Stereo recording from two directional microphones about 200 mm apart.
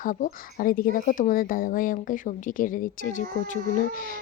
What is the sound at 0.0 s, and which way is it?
A woman's voice, 40° left (ahead or behind).